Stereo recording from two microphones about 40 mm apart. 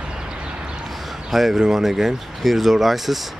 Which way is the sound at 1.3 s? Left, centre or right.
Centre.